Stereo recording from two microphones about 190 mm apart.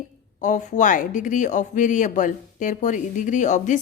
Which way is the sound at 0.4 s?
40° left (ahead or behind).